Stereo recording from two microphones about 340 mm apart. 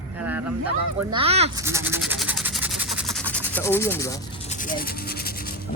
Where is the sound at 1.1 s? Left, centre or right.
Centre.